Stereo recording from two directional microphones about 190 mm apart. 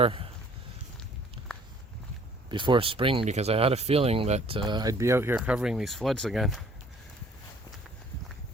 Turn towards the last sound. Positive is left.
turn(degrees=0)  # may be behind; listen again after turning